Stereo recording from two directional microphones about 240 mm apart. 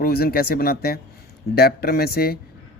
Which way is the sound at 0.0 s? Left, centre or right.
Left.